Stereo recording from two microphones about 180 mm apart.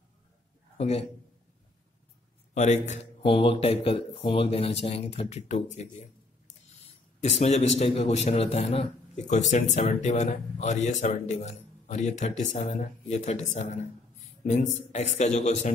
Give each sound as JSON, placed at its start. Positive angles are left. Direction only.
{"t": 0.7, "sound": "a man's voice", "side_deg": 35}
{"t": 2.5, "sound": "speech", "side_deg": 40}
{"t": 7.2, "sound": "speech", "side_deg": 40}